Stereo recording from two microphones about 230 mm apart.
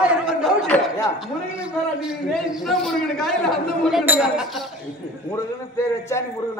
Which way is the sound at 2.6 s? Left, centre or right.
Centre.